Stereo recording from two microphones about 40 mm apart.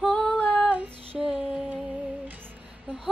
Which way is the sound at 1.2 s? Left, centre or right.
Right.